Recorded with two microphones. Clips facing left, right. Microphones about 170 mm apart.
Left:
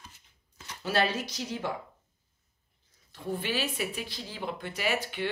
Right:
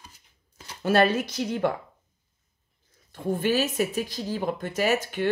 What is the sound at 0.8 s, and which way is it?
Speech, 50° right (ahead or behind).